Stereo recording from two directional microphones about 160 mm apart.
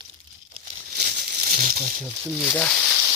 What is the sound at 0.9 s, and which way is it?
Crumpling, 75° right (ahead or behind).